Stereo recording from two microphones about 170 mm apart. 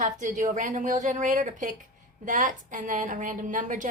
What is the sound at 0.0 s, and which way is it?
Speech, 45° right (ahead or behind).